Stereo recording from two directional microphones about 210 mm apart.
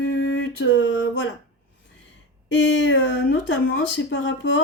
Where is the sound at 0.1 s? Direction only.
60° left (ahead or behind).